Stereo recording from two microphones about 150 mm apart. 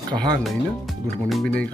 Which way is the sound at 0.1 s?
30° right (ahead or behind).